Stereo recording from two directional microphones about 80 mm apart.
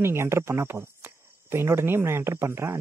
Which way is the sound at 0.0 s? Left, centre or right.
Right.